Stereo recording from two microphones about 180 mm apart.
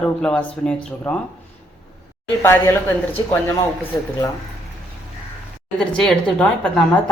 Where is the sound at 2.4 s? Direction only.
15° left (ahead or behind).